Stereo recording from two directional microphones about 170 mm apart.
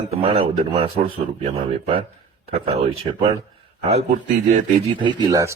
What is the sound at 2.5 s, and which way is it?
Speech, 35° right (ahead or behind).